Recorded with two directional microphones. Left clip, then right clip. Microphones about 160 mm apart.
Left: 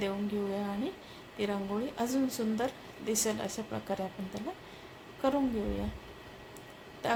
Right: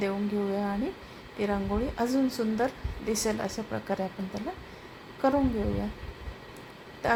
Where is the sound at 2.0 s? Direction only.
20° right (ahead or behind).